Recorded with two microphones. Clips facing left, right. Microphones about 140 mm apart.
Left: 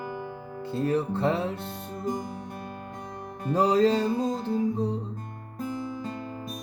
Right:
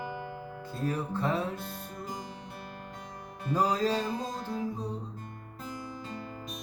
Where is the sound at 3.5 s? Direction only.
25° left (ahead or behind).